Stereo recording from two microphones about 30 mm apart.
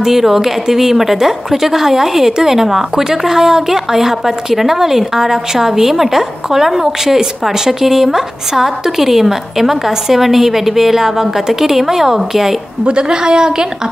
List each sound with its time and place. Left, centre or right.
0.0 s a woman's voice: centre
12.8 s a woman's voice: right